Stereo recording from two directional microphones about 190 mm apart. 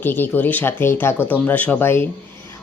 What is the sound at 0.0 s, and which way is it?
Speech, 10° left (ahead or behind).